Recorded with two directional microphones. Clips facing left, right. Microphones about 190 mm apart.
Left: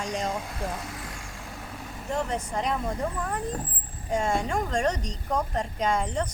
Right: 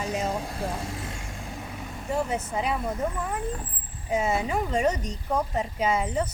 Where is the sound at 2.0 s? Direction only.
5° right (ahead or behind).